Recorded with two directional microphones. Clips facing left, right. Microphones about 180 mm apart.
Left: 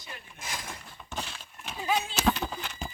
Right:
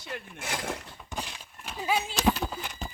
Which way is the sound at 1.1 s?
15° right (ahead or behind).